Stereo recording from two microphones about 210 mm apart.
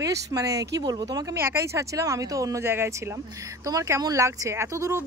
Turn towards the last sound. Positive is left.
turn(degrees=-15)  # may be behind; listen again after turning